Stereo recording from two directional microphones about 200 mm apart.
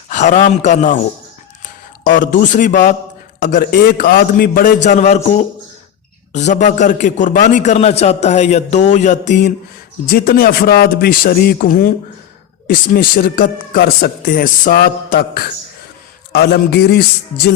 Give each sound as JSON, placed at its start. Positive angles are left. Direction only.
{"t": 0.1, "sound": "a man's voice", "side_deg": 40}
{"t": 10.1, "sound": "a man's voice", "side_deg": 50}